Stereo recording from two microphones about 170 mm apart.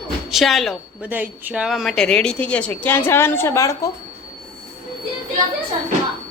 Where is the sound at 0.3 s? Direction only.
Centre (ahead or behind).